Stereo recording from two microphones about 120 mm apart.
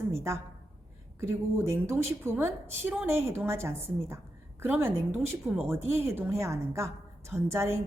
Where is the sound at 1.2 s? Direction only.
25° right (ahead or behind).